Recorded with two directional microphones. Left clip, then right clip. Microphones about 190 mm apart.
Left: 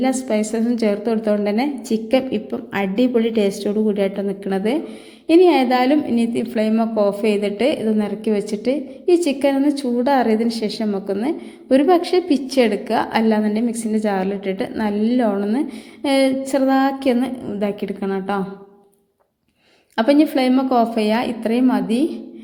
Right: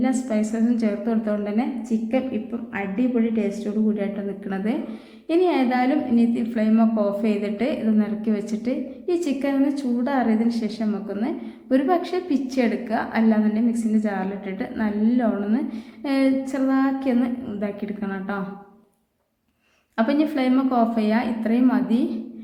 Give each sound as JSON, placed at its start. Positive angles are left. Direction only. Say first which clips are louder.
{"t": 0.0, "sound": "a woman's voice", "louder": "left 4 dB", "side_deg": 30}
{"t": 20.0, "sound": "a woman's voice", "louder": "left 6 dB", "side_deg": 25}